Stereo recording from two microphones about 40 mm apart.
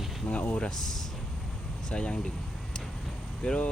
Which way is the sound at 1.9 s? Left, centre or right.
Left.